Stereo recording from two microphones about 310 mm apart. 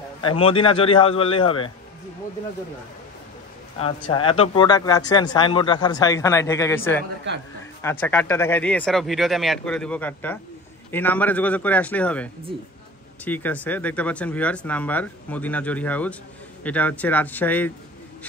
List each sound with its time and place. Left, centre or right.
0.4 s speech: centre
3.7 s speech: centre